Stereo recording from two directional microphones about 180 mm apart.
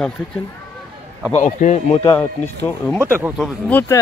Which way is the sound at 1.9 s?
30° left (ahead or behind).